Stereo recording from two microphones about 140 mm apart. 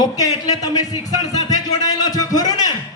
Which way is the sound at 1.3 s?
25° left (ahead or behind).